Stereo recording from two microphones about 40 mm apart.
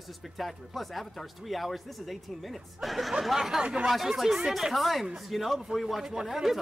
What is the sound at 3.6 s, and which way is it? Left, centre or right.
Speech, right.